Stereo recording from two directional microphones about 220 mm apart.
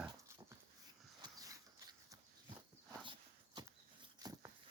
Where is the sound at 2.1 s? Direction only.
20° right (ahead or behind).